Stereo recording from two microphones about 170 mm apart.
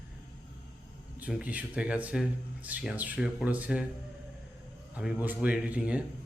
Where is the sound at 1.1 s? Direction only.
10° right (ahead or behind).